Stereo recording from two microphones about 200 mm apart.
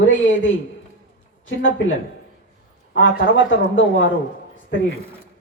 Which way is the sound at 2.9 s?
75° left (ahead or behind).